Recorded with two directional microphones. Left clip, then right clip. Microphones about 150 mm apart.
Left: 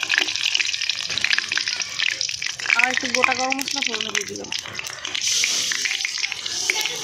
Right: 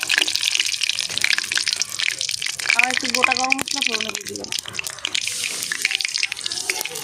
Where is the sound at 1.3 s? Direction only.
25° right (ahead or behind).